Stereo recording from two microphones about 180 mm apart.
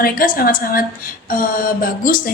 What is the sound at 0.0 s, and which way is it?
A woman's voice, 55° left (ahead or behind).